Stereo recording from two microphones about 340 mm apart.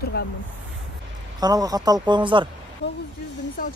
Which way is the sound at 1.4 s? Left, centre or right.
Centre.